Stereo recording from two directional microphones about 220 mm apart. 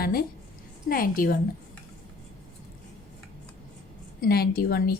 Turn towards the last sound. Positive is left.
turn(degrees=45)  # may be behind; listen again after turning